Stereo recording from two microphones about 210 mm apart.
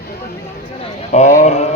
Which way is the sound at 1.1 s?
35° left (ahead or behind).